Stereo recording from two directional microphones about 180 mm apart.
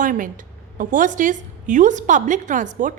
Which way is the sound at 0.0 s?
45° right (ahead or behind).